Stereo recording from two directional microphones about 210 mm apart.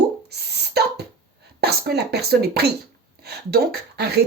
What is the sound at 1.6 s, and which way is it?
Music, 50° right (ahead or behind).